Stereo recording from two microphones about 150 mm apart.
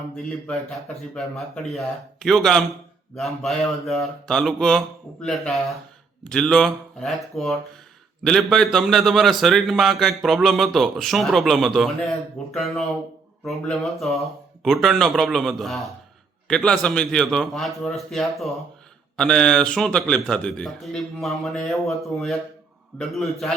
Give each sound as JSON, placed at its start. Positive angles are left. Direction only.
{"t": 1.1, "sound": "a man's voice", "side_deg": 0}